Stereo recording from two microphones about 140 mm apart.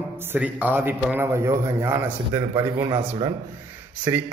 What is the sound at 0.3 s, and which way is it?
A man's voice, 10° right (ahead or behind).